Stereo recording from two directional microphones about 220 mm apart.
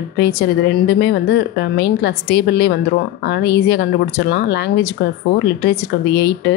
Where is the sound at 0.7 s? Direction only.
50° left (ahead or behind).